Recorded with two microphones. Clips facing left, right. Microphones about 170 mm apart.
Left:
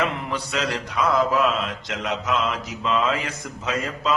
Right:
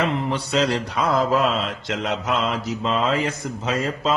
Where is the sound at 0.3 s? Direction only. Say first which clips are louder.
Right 5 dB; 30° right (ahead or behind).